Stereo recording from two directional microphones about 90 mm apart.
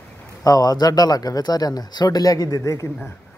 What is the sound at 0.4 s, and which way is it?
A man's voice, 45° left (ahead or behind).